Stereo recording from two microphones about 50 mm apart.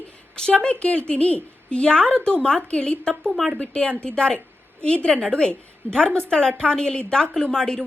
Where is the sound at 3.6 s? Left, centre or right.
Left.